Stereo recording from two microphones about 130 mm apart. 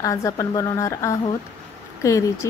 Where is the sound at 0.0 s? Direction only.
25° left (ahead or behind).